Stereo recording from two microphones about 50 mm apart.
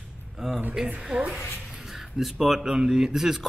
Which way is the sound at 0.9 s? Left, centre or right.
Right.